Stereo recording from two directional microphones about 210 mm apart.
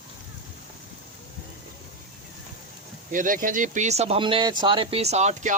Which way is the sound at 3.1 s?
40° right (ahead or behind).